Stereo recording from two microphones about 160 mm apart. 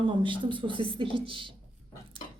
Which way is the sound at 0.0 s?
30° right (ahead or behind).